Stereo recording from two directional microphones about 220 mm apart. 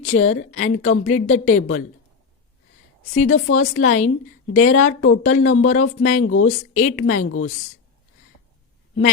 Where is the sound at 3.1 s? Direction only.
75° left (ahead or behind).